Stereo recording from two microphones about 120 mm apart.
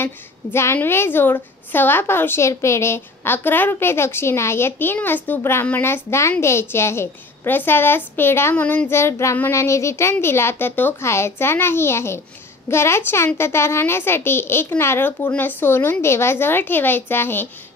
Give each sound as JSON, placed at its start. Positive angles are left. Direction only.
{"t": 0.0, "sound": "a woman's voice", "side_deg": 20}